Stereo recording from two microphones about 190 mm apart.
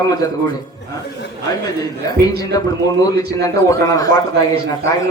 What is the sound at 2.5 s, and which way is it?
A man's voice, 20° left (ahead or behind).